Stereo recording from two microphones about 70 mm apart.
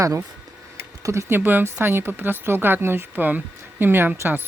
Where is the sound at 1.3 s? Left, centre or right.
Right.